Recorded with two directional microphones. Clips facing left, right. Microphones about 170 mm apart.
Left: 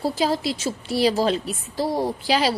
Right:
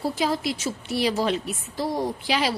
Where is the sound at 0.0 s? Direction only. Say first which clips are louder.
Left 2 dB; 30° left (ahead or behind).